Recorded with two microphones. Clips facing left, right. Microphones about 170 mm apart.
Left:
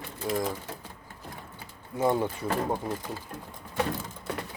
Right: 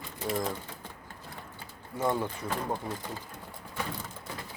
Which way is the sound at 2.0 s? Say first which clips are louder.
Left 4 dB; 15° left (ahead or behind).